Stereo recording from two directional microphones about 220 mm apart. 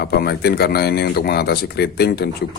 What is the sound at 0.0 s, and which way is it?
Speech, 45° left (ahead or behind).